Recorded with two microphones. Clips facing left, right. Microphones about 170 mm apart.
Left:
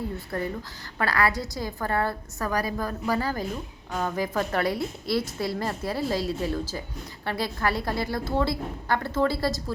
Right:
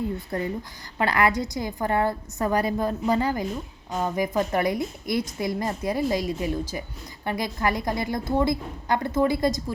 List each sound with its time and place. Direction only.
0.3 s a woman's voice: 20° right (ahead or behind)